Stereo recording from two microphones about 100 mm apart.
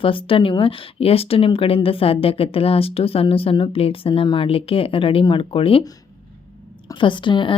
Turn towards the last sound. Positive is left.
turn(degrees=55)  # may be behind; listen again after turning